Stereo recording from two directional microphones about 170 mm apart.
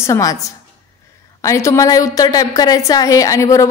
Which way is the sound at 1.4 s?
15° left (ahead or behind).